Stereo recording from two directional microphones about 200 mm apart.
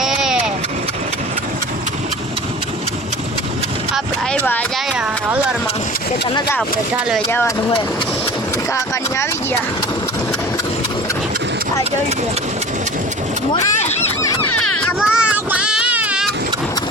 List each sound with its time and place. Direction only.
0.0 s vehicle: centre (ahead or behind)
3.9 s a sound: 10° left (ahead or behind)
6.6 s speech: centre (ahead or behind)
7.3 s speech: 10° left (ahead or behind)
8.7 s speech: 15° left (ahead or behind)
14.5 s a sound: 90° left
15.0 s child singing: 5° right (ahead or behind)